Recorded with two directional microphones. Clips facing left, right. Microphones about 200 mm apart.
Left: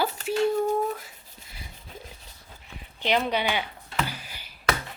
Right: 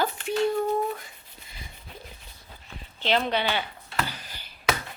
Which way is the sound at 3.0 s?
15° left (ahead or behind).